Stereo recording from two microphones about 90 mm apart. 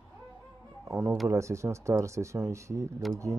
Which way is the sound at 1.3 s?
35° right (ahead or behind).